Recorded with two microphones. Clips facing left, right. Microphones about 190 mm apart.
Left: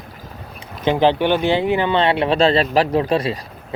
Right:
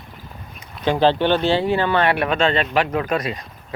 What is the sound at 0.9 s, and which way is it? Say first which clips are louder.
Speech: left 1 dB; 15° left (ahead or behind).